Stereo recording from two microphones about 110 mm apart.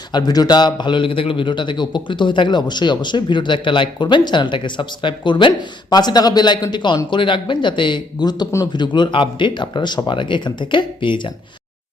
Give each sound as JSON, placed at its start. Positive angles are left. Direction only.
{"t": 0.1, "sound": "a man's voice", "side_deg": 40}